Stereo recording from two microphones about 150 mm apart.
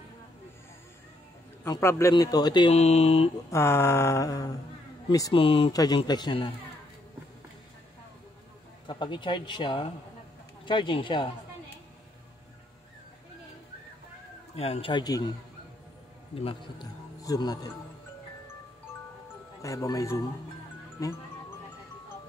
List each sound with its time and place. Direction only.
1.6 s a man's voice: 20° left (ahead or behind)
2.7 s speech: 45° left (ahead or behind)
3.4 s a man's voice: 15° left (ahead or behind)
5.3 s speech: 35° left (ahead or behind)
5.7 s a man's voice: 25° left (ahead or behind)
8.8 s speech: 30° left (ahead or behind)
14.5 s speech: 40° left (ahead or behind)
16.3 s speech: 40° left (ahead or behind)
17.2 s speech: 25° left (ahead or behind)
19.6 s a man's voice: 20° left (ahead or behind)